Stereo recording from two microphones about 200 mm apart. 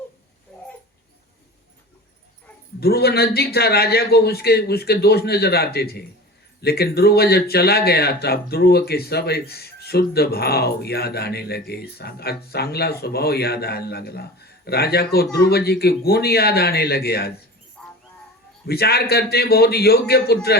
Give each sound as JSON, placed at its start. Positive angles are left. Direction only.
{"t": 2.8, "sound": "speech", "side_deg": 50}
{"t": 18.7, "sound": "speech", "side_deg": 50}